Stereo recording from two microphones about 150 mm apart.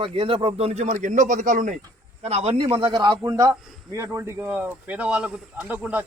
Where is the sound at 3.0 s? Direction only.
25° right (ahead or behind).